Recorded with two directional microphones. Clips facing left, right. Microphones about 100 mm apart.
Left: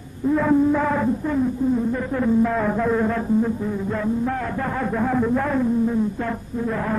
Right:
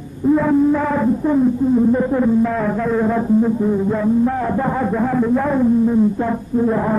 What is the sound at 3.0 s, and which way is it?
Music, 15° right (ahead or behind).